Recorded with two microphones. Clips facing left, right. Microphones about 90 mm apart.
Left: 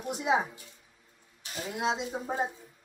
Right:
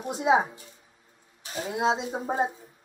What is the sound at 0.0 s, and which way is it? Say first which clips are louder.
A woman's voice: right 5 dB; 25° right (ahead or behind).